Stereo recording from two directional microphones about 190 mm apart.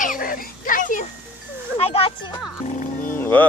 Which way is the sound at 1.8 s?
30° left (ahead or behind).